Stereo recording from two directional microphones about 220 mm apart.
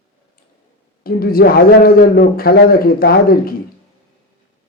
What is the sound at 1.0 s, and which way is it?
A man's voice, 40° left (ahead or behind).